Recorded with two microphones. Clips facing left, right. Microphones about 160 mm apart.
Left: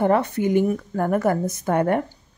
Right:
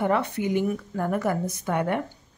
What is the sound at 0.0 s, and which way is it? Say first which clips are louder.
Speech: left 5 dB; 40° left (ahead or behind).